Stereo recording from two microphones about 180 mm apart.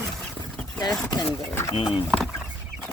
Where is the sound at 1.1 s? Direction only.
25° left (ahead or behind).